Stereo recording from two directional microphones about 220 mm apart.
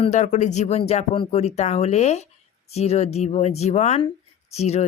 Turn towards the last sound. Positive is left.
turn(degrees=30)  # may be behind; listen again after turning